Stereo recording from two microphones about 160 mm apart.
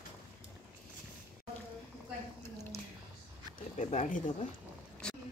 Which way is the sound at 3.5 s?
50° left (ahead or behind).